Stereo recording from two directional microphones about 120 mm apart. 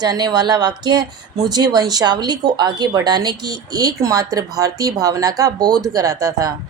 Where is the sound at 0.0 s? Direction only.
35° right (ahead or behind).